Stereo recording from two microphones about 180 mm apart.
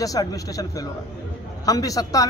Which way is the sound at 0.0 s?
20° left (ahead or behind).